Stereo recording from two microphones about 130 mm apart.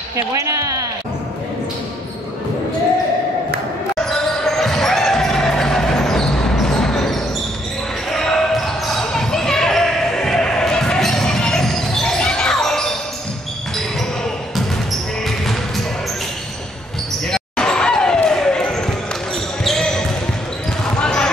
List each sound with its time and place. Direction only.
0.1 s speech: 25° right (ahead or behind)
4.1 s basketball bounce: 5° left (ahead or behind)
14.5 s basketball bounce: centre (ahead or behind)
17.3 s basketball bounce: 5° left (ahead or behind)